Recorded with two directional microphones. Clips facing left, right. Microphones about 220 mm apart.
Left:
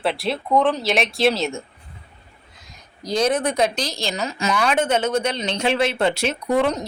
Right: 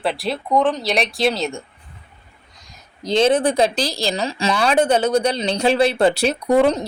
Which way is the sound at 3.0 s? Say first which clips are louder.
Right 4 dB; 25° right (ahead or behind).